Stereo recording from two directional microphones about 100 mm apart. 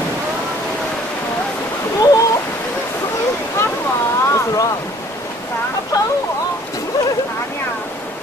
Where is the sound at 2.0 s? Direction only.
35° left (ahead or behind).